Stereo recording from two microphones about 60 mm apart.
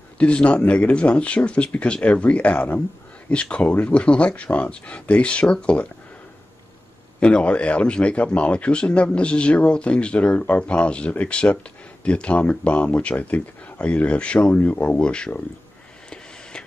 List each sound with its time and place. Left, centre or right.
0.2 s speech: centre
7.2 s speech: centre